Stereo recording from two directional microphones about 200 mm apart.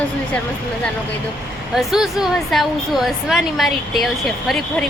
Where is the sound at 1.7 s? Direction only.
Centre (ahead or behind).